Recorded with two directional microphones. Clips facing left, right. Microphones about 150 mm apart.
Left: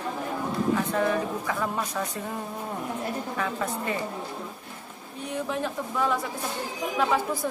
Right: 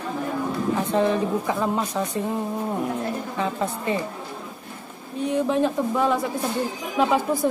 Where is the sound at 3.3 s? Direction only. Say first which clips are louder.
Right 3 dB; 25° right (ahead or behind).